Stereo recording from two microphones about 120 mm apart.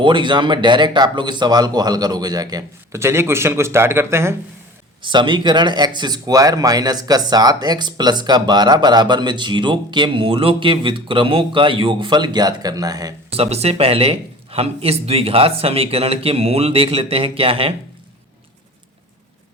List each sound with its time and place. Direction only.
0.0 s speech: 40° right (ahead or behind); by 4.4 s 20° right (ahead or behind)
5.0 s speech: 40° right (ahead or behind)
13.3 s speech: 55° right (ahead or behind)